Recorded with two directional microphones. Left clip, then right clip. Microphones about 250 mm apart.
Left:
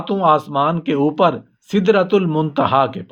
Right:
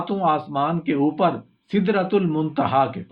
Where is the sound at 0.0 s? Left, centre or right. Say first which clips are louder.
Left 6 dB; left.